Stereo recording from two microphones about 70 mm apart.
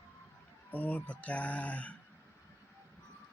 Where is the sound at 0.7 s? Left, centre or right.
Left.